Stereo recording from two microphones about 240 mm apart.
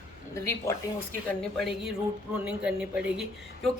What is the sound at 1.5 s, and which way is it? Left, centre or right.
A man's voice, centre.